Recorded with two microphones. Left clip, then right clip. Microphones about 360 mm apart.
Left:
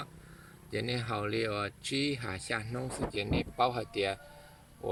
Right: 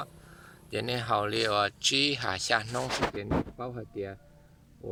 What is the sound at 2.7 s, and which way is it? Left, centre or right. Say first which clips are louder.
Speech: right 7 dB; right.